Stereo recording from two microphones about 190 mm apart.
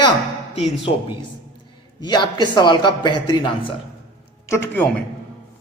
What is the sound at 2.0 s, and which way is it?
A man's voice, 25° left (ahead or behind).